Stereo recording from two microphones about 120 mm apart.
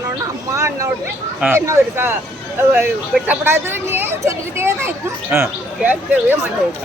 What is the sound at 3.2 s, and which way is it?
A woman's voice, 20° right (ahead or behind).